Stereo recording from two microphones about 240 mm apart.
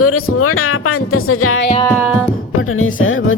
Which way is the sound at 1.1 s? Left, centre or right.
Left.